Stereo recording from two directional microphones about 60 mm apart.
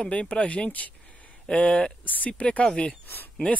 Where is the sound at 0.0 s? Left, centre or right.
Centre.